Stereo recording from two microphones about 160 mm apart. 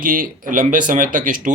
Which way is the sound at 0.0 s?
60° right (ahead or behind).